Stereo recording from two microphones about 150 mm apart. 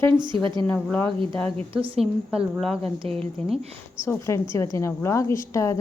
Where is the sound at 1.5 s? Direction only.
35° right (ahead or behind).